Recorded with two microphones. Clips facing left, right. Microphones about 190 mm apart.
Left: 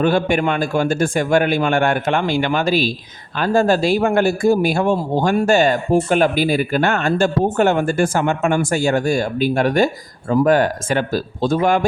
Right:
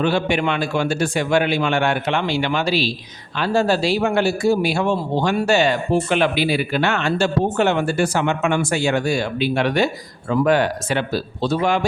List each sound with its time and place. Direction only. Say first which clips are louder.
0.0 s a man's voice: left 3 dB; 50° left (ahead or behind)